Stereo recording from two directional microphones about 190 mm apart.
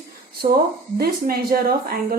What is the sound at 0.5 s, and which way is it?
A woman's voice, 55° right (ahead or behind).